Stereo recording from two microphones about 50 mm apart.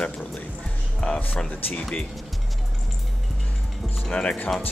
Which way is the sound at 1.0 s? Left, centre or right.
Left.